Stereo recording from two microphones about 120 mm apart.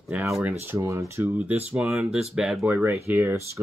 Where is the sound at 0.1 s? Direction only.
15° right (ahead or behind).